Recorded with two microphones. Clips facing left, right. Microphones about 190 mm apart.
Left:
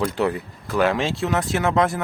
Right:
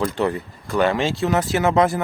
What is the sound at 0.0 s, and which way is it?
Speech, centre (ahead or behind).